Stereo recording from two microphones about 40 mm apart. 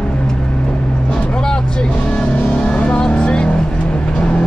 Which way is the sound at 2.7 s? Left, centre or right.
Left.